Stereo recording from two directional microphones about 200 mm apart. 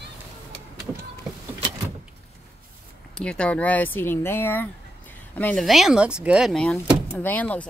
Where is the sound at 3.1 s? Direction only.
5° left (ahead or behind).